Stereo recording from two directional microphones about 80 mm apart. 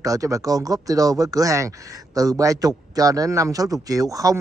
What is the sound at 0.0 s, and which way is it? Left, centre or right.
A man's voice, right.